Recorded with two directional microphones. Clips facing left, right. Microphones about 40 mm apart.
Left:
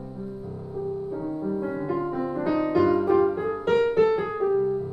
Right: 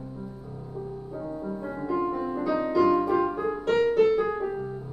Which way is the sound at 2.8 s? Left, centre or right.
Centre.